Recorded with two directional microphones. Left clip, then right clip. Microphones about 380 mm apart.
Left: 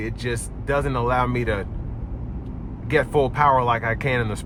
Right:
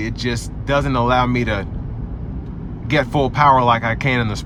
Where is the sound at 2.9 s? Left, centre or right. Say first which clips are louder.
Right 2 dB; centre.